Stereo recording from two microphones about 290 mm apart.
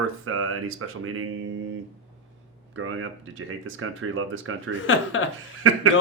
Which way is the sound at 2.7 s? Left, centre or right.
Right.